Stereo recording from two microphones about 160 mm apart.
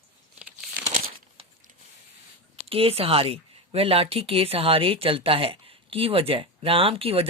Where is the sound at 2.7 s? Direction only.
40° right (ahead or behind).